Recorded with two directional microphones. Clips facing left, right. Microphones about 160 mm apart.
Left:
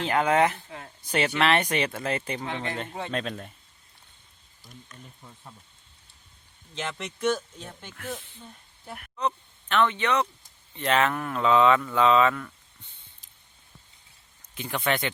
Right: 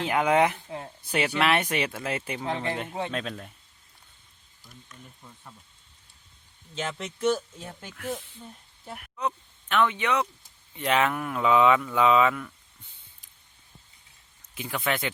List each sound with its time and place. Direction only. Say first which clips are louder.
0.0 s speech: even; 10° right (ahead or behind)
2.5 s speech: right 6 dB; 35° right (ahead or behind)
2.7 s speech: even; 10° right (ahead or behind)
4.9 s speech: left 1 dB; 10° left (ahead or behind)
6.8 s speech: right 1 dB; 5° right (ahead or behind)
14.5 s speech: left 2 dB; 5° right (ahead or behind)